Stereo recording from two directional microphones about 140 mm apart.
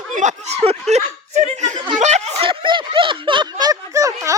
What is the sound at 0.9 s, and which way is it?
Speech, 55° right (ahead or behind).